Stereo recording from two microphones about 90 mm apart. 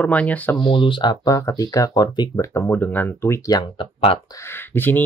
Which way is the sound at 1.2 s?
45° left (ahead or behind).